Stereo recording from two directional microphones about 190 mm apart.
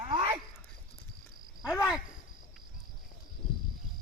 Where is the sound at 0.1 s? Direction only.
20° right (ahead or behind).